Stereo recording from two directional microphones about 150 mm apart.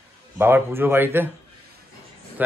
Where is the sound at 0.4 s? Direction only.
15° right (ahead or behind).